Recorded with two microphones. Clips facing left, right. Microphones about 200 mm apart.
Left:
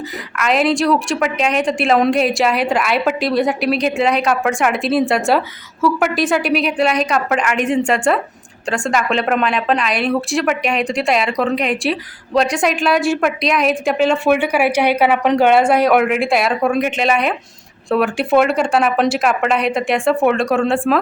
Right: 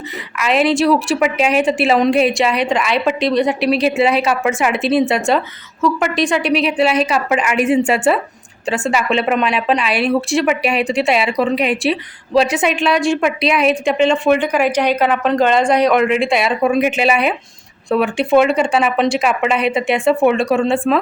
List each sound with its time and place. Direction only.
0.3 s speech: centre (ahead or behind)